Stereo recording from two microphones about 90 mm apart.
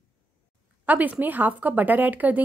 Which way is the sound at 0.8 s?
20° right (ahead or behind).